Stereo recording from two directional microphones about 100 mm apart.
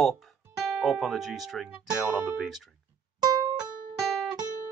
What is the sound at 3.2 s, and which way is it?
Music, 40° right (ahead or behind).